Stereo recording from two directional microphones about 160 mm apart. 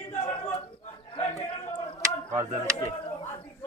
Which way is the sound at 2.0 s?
20° right (ahead or behind).